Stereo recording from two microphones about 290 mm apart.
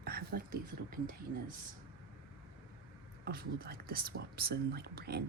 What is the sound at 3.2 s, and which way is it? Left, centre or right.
Speech, right.